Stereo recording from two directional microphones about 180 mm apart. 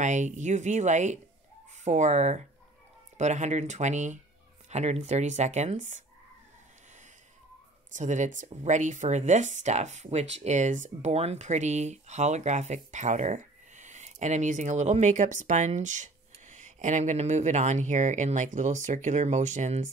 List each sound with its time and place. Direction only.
0.0 s speech: 40° right (ahead or behind)
7.9 s speech: 40° right (ahead or behind)